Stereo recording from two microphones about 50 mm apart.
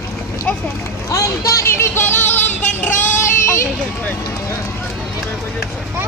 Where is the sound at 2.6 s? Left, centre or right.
Left.